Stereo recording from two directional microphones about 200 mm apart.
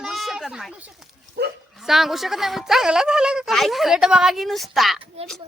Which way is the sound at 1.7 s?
Centre (ahead or behind).